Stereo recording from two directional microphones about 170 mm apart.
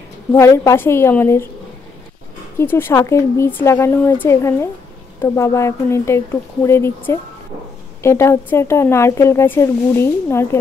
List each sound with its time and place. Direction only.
0.3 s speech: 15° left (ahead or behind)
2.6 s speech: 15° left (ahead or behind)